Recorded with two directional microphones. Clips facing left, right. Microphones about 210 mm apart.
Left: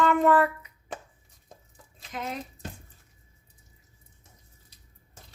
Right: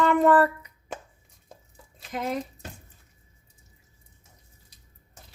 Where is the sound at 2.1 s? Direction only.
35° right (ahead or behind).